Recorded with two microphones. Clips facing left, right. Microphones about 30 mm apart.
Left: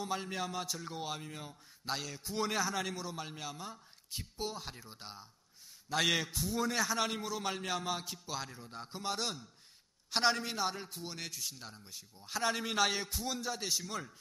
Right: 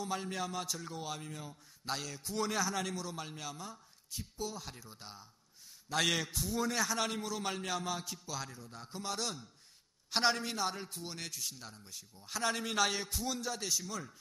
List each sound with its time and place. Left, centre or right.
0.0 s a man's voice: centre
4.1 s speech: left
4.6 s a man's voice: centre
5.9 s a man's voice: centre
8.5 s a man's voice: left
10.1 s a man's voice: centre